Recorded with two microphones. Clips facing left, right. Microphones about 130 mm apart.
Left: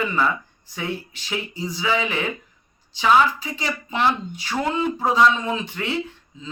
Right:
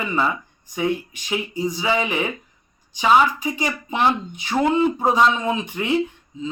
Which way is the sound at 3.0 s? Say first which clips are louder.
Right 1 dB; 15° right (ahead or behind).